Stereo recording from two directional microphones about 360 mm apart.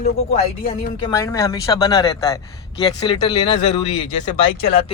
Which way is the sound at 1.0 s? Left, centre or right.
Centre.